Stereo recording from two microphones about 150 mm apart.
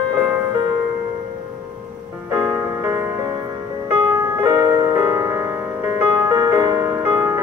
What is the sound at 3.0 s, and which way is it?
Music, 15° right (ahead or behind).